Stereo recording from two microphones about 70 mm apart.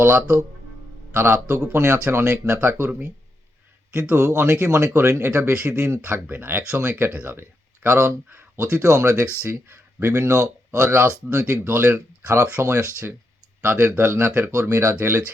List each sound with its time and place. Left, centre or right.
0.0 s a man's voice: right
4.1 s speech: right